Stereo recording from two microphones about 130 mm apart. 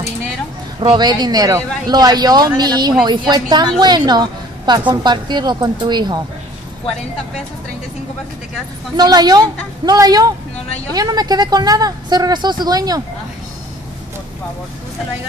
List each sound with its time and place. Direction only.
0.7 s speech: 35° right (ahead or behind)
8.9 s speech: 30° right (ahead or behind)